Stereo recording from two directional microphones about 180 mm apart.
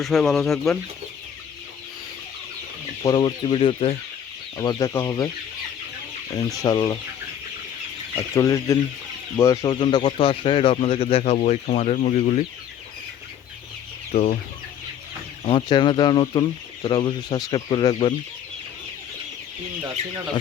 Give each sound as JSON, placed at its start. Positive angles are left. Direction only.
{"t": 0.0, "sound": "speech", "side_deg": 0}
{"t": 3.0, "sound": "speech", "side_deg": 25}
{"t": 4.5, "sound": "speech", "side_deg": 20}
{"t": 6.6, "sound": "speech", "side_deg": 20}
{"t": 8.1, "sound": "speech", "side_deg": 15}
{"t": 9.7, "sound": "speech", "side_deg": 30}
{"t": 14.1, "sound": "speech", "side_deg": 40}
{"t": 15.4, "sound": "speech", "side_deg": 25}